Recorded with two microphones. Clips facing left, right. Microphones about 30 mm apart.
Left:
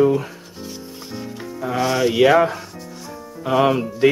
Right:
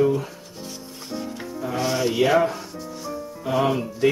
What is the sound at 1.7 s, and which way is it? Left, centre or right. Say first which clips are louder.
Music: left 5 dB; centre.